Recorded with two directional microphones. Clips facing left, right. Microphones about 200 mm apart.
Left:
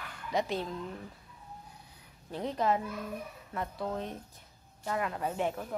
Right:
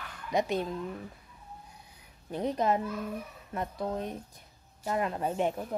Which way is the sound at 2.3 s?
15° right (ahead or behind).